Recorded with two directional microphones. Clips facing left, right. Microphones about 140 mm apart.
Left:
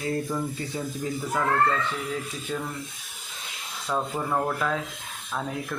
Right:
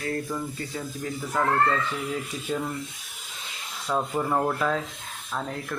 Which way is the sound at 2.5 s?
10° right (ahead or behind).